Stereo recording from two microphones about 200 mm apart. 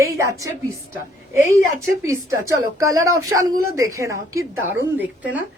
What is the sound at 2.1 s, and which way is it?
A woman's voice, 15° right (ahead or behind).